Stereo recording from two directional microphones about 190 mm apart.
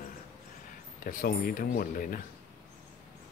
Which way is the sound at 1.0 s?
50° left (ahead or behind).